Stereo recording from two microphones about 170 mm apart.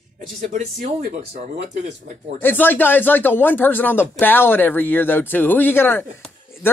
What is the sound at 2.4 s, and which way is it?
Speech, 10° left (ahead or behind).